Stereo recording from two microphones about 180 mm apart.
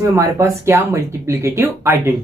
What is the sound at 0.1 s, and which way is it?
Speech, 15° right (ahead or behind).